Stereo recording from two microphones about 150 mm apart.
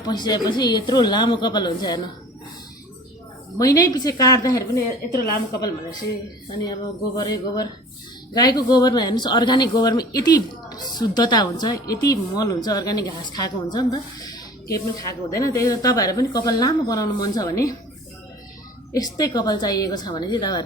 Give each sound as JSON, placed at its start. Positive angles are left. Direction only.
{"t": 0.0, "sound": "speech", "side_deg": 30}
{"t": 3.6, "sound": "speech", "side_deg": 25}
{"t": 7.2, "sound": "speech", "side_deg": 30}
{"t": 18.9, "sound": "speech", "side_deg": 25}